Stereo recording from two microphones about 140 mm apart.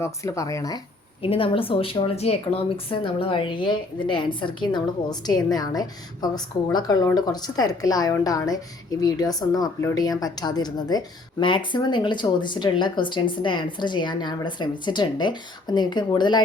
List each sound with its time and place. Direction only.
0.0 s speech: 20° left (ahead or behind)
1.2 s speech: 40° left (ahead or behind)